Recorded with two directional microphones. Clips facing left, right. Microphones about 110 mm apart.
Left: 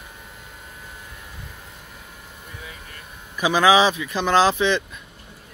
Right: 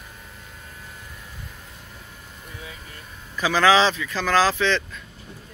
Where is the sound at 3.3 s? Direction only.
15° left (ahead or behind).